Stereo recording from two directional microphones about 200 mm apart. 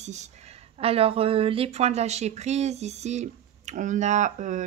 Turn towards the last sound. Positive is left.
turn(degrees=-40)  # may be behind; listen again after turning